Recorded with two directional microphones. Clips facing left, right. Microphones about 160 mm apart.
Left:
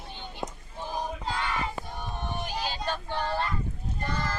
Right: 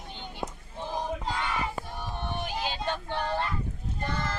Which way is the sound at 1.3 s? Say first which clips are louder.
Left 2 dB; 10° right (ahead or behind).